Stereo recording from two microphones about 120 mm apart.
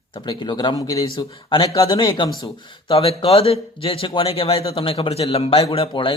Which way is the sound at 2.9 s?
55° left (ahead or behind).